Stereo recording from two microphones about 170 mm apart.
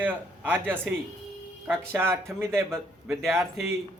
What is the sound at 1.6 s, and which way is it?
A man's voice, 15° right (ahead or behind).